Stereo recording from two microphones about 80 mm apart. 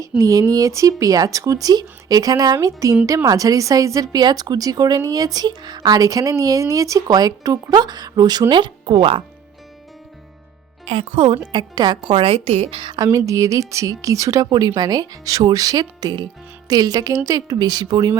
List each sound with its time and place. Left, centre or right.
0.2 s a woman's voice: right
11.1 s speech: right
13.1 s a woman's voice: right